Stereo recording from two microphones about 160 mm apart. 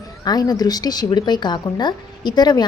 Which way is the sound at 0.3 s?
25° left (ahead or behind).